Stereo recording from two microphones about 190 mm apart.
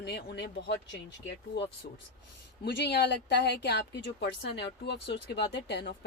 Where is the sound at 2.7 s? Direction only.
60° left (ahead or behind).